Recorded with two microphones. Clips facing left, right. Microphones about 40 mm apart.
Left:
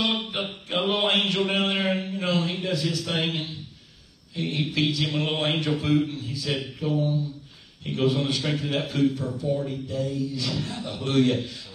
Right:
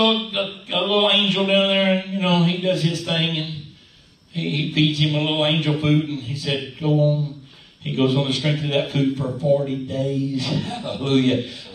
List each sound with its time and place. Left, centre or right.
0.0 s a man's voice: right